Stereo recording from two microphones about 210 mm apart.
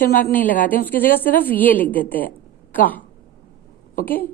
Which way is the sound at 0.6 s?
10° left (ahead or behind).